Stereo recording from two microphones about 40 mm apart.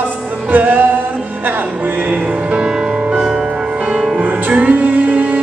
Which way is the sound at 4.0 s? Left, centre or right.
Centre.